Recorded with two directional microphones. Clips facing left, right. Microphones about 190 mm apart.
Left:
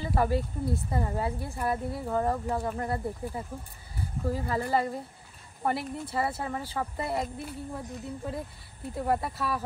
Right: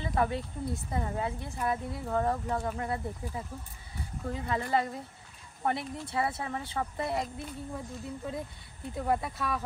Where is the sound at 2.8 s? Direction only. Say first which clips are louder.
Left 3 dB; 30° left (ahead or behind).